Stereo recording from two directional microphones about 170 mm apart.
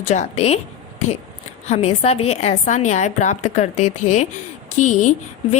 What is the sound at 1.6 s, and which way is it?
A woman's voice, 40° left (ahead or behind).